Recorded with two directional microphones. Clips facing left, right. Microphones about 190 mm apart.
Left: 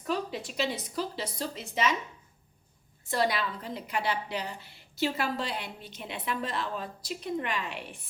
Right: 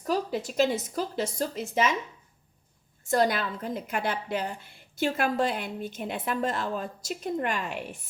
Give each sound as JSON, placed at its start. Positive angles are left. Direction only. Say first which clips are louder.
{"t": 0.0, "sound": "a woman's voice", "louder": "right 4 dB", "side_deg": -40}
{"t": 3.1, "sound": "a woman's voice", "louder": "right 4 dB", "side_deg": -45}